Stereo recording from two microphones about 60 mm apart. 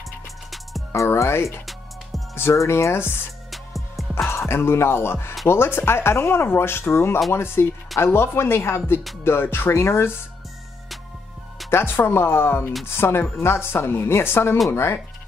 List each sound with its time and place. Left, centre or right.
0.9 s speech: left
2.5 s speech: left
3.5 s music: centre
4.1 s speech: left
11.7 s speech: left